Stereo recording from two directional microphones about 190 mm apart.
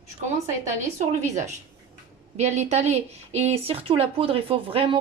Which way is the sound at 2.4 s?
35° right (ahead or behind).